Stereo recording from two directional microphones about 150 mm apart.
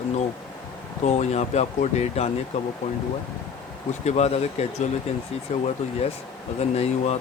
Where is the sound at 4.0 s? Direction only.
45° left (ahead or behind).